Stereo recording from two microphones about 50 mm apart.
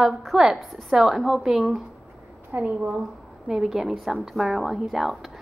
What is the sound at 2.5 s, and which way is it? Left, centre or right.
Speech, right.